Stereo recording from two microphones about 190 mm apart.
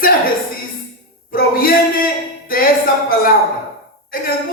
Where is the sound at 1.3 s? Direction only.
50° left (ahead or behind).